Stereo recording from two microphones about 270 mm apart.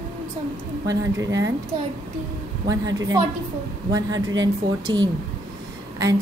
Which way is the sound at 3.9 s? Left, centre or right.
Centre.